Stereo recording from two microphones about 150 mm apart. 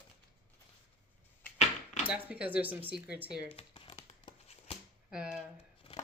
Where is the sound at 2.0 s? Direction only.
10° right (ahead or behind).